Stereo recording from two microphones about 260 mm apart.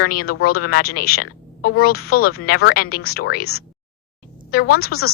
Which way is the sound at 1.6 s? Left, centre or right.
Left.